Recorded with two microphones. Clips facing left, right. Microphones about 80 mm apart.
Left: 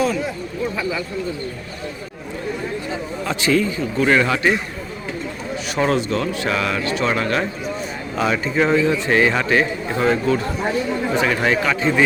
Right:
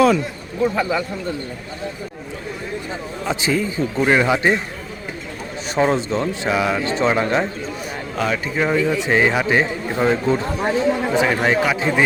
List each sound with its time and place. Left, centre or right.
0.8 s speech: right
3.2 s a man's voice: centre
5.8 s speech: centre
8.1 s speech: centre
9.0 s a man's voice: centre